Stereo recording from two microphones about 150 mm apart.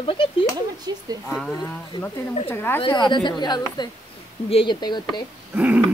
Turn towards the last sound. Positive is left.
turn(degrees=-10)  # may be behind; listen again after turning